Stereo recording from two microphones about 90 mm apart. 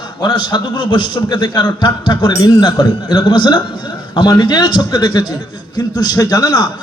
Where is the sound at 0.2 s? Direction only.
55° left (ahead or behind).